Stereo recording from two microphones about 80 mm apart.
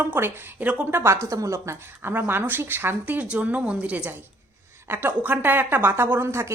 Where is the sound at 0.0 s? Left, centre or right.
Right.